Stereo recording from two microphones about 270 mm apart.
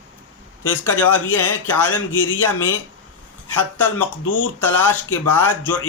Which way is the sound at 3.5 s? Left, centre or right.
Centre.